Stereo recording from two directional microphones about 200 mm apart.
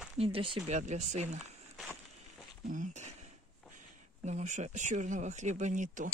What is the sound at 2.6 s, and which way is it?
Speech, 40° right (ahead or behind).